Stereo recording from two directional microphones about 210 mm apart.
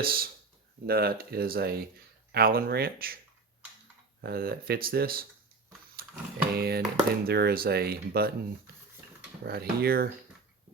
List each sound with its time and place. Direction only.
0.0 s speech: 45° right (ahead or behind)
4.2 s speech: 45° right (ahead or behind)
6.0 s music: 45° right (ahead or behind)
6.5 s speech: 50° right (ahead or behind)